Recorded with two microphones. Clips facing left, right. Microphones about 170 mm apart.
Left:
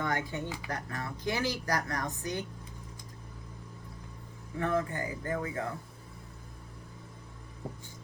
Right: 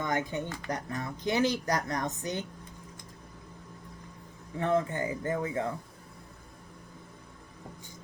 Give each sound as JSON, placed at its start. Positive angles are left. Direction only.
{"t": 0.0, "sound": "speech", "side_deg": -20}
{"t": 0.4, "sound": "speech", "side_deg": 5}
{"t": 0.7, "sound": "speech", "side_deg": -20}
{"t": 4.6, "sound": "speech", "side_deg": -20}